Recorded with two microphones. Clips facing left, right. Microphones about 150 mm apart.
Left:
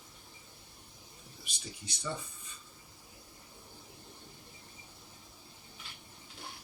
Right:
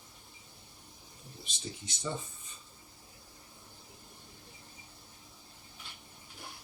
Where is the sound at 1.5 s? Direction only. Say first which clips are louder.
Right 4 dB; 25° right (ahead or behind).